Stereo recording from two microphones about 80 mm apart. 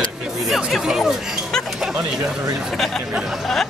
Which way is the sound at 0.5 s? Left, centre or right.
Centre.